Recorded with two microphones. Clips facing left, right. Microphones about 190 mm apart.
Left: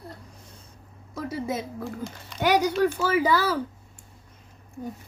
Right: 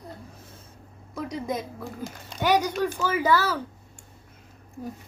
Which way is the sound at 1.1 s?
5° left (ahead or behind).